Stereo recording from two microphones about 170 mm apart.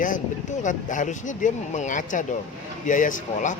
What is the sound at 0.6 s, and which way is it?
Speech, 50° left (ahead or behind).